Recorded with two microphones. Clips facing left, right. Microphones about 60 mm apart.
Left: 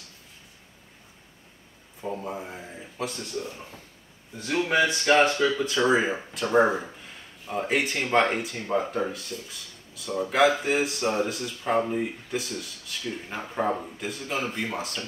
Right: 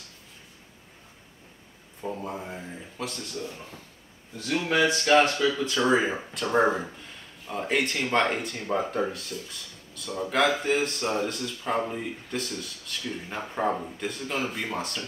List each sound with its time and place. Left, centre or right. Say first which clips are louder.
2.0 s speech: left 1 dB; centre
4.4 s speech: left 1 dB; left; by 15.0 s centre